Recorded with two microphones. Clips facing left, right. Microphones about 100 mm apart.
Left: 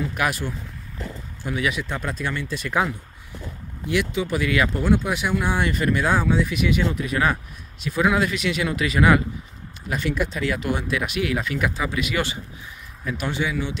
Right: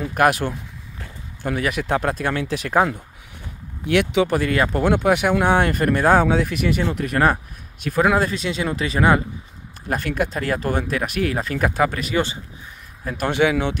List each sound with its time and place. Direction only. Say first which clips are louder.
0.1 s speech: right 7 dB; 55° right (ahead or behind)
3.8 s speech: right 6 dB; 65° right (ahead or behind)
4.4 s speech: right 2 dB; 45° right (ahead or behind)
4.8 s speech: right 4 dB; 60° right (ahead or behind)
6.2 s speech: right 2 dB; 60° right (ahead or behind); by 9.2 s 30° right (ahead or behind)
9.8 s speech: right 2 dB; 50° right (ahead or behind)
11.7 s speech: right 7 dB; 60° right (ahead or behind)
12.0 s speech: right 3 dB; 30° right (ahead or behind)
13.3 s speech: right 9 dB; 75° right (ahead or behind)